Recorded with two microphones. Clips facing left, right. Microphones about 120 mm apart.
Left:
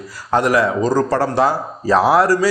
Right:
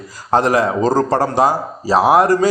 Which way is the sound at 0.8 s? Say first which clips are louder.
Right 1 dB; 50° right (ahead or behind).